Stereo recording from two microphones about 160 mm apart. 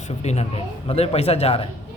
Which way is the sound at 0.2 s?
40° left (ahead or behind).